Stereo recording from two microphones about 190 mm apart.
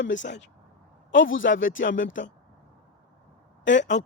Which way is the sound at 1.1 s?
85° left.